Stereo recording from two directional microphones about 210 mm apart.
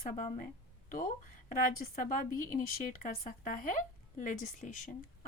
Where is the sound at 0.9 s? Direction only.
40° left (ahead or behind).